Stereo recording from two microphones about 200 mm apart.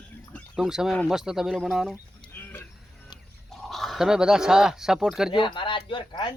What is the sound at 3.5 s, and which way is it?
Speech, centre (ahead or behind).